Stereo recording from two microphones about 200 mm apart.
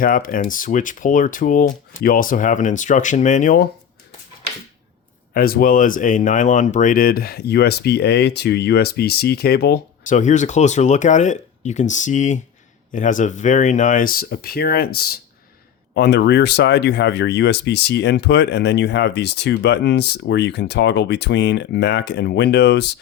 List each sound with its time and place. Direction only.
0.0 s speech: 45° left (ahead or behind)
5.3 s speech: 50° left (ahead or behind)
10.2 s speech: 35° left (ahead or behind); by 22.9 s 55° left (ahead or behind)